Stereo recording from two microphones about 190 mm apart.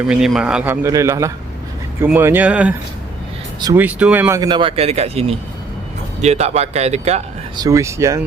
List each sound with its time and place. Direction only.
0.1 s a man's voice: 5° right (ahead or behind)
3.6 s a man's voice: 20° right (ahead or behind)
3.8 s a man's voice: 5° right (ahead or behind)
4.4 s speech: 25° right (ahead or behind)
6.2 s speech: 35° right (ahead or behind)
7.5 s a man's voice: 20° right (ahead or behind)